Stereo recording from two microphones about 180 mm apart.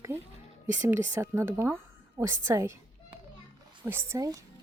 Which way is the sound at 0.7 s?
10° right (ahead or behind).